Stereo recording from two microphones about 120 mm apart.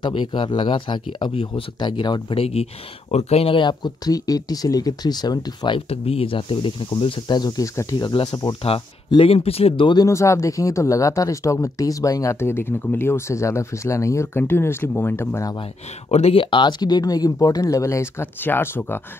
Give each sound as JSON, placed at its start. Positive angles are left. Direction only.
{"t": 0.0, "sound": "speech", "side_deg": 45}
{"t": 5.9, "sound": "speech", "side_deg": 55}
{"t": 8.1, "sound": "speech", "side_deg": 40}
{"t": 8.6, "sound": "speech", "side_deg": 50}
{"t": 9.9, "sound": "speech", "side_deg": 25}
{"t": 16.1, "sound": "speech", "side_deg": 60}
{"t": 16.4, "sound": "speech", "side_deg": 40}